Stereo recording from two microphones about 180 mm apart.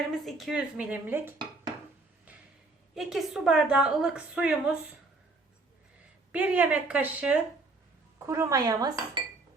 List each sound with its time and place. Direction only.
0.1 s a woman's voice: centre (ahead or behind)
2.9 s a woman's voice: centre (ahead or behind)
6.3 s a woman's voice: 10° right (ahead or behind)
8.2 s dishes: 15° right (ahead or behind)